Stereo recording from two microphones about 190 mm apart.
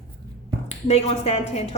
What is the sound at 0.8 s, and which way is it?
Speech, 35° left (ahead or behind).